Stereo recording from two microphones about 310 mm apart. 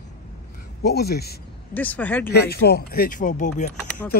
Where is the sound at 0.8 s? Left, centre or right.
Left.